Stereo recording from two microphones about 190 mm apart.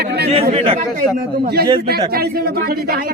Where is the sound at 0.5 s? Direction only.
30° right (ahead or behind).